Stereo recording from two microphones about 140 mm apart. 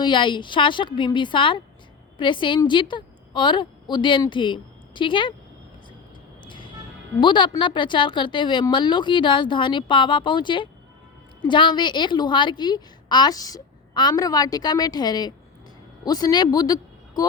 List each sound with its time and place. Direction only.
0.0 s a woman's voice: 35° left (ahead or behind)
6.4 s a sound: 35° left (ahead or behind)
7.2 s a woman's voice: 35° left (ahead or behind)